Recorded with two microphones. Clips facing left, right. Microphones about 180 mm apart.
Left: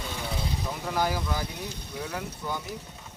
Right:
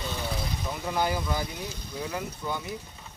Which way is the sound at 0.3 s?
Centre (ahead or behind).